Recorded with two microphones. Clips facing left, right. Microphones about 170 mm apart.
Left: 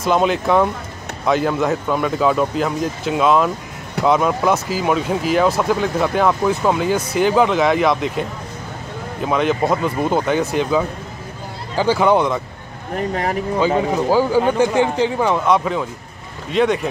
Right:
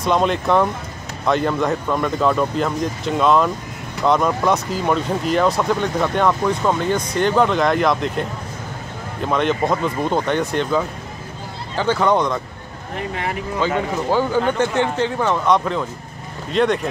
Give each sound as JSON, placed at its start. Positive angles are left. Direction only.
{"t": 0.0, "sound": "speech", "side_deg": 0}
{"t": 13.1, "sound": "speech", "side_deg": 40}
{"t": 13.7, "sound": "speech", "side_deg": 10}